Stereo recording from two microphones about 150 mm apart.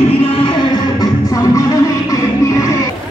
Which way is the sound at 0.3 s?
35° left (ahead or behind).